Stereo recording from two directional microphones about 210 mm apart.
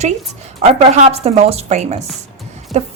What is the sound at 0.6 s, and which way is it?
Speech, 30° right (ahead or behind).